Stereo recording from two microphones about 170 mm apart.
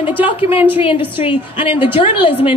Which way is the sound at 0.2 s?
35° left (ahead or behind).